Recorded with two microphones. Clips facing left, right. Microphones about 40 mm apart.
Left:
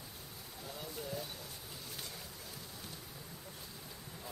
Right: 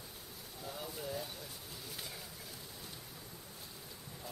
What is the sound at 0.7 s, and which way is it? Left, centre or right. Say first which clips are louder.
Speech: right 1 dB; centre.